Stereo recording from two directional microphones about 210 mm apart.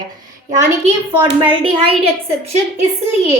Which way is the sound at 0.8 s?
30° right (ahead or behind).